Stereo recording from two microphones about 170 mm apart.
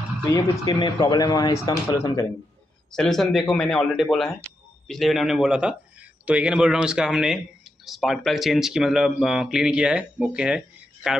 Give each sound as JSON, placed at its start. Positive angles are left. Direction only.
{"t": 0.3, "sound": "speech", "side_deg": 25}
{"t": 2.9, "sound": "speech", "side_deg": 0}